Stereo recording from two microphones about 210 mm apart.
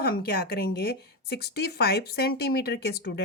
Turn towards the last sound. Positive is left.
turn(degrees=50)  # may be behind; listen again after turning